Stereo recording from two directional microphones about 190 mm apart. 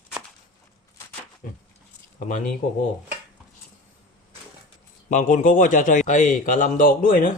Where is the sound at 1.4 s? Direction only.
45° left (ahead or behind).